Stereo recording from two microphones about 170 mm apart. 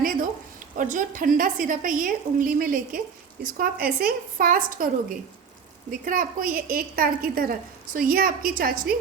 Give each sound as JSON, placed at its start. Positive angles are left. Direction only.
{"t": 0.8, "sound": "a woman's voice", "side_deg": -50}